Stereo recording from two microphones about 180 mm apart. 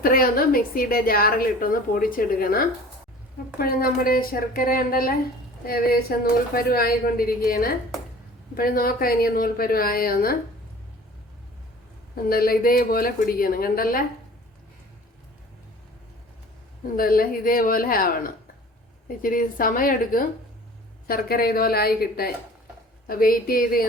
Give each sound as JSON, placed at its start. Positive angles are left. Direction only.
{"t": 0.0, "sound": "a woman's voice", "side_deg": 55}
{"t": 12.1, "sound": "a woman's voice", "side_deg": 55}
{"t": 17.0, "sound": "a woman's voice", "side_deg": 55}